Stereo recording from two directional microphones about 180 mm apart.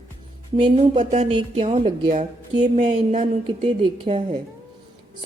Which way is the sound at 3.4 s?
30° right (ahead or behind).